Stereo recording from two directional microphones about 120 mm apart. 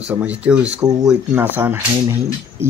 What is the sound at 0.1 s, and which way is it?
Speech, 10° right (ahead or behind).